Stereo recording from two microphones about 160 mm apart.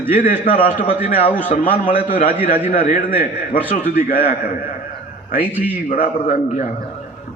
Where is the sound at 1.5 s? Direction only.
60° left (ahead or behind).